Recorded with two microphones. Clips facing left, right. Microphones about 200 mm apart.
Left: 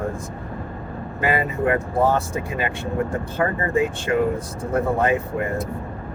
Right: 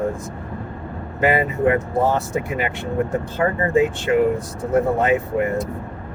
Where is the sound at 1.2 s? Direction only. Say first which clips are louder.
Right 4 dB; 20° right (ahead or behind).